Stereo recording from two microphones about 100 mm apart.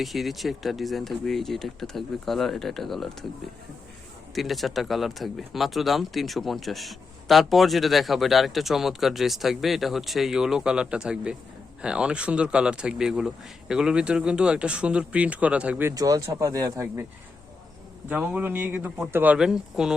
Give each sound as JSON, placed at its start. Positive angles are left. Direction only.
{"t": 0.0, "sound": "speech", "side_deg": 0}
{"t": 4.4, "sound": "speech", "side_deg": 0}
{"t": 16.0, "sound": "speech", "side_deg": -35}
{"t": 18.1, "sound": "speech", "side_deg": -15}